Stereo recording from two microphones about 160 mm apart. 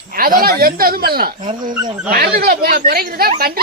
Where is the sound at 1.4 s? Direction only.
30° right (ahead or behind).